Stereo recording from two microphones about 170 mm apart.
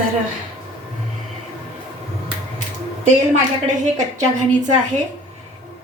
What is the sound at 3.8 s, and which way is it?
Speech, 45° right (ahead or behind).